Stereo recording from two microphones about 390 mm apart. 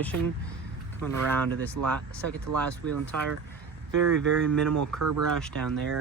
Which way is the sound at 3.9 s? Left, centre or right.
Right.